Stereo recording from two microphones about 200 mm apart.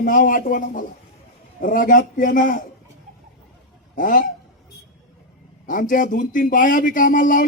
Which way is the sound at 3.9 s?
40° left (ahead or behind).